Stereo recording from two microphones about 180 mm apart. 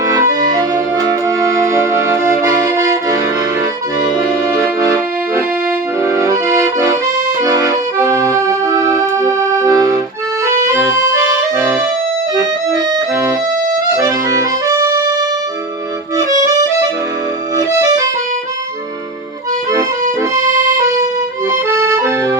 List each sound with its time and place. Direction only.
0.0 s accordion: 20° right (ahead or behind)
0.3 s music: 20° right (ahead or behind)
6.0 s accordion: 15° right (ahead or behind)
17.7 s music: 20° right (ahead or behind)
20.3 s accordion: 20° right (ahead or behind)